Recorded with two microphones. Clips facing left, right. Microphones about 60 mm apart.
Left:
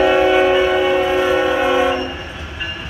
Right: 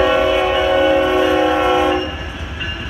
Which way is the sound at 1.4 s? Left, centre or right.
Centre.